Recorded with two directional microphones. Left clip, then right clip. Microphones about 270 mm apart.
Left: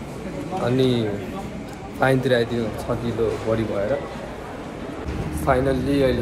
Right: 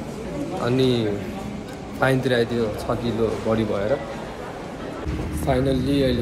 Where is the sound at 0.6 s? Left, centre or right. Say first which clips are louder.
Even; centre.